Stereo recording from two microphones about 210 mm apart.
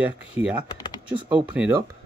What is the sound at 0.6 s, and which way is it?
Speech, 20° left (ahead or behind).